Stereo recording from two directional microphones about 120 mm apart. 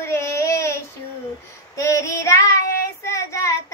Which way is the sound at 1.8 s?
25° left (ahead or behind).